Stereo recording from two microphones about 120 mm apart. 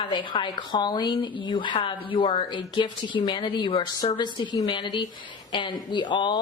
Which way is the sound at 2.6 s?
40° left (ahead or behind).